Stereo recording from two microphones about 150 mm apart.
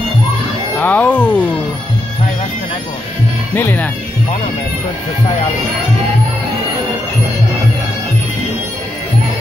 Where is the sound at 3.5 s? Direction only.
10° left (ahead or behind).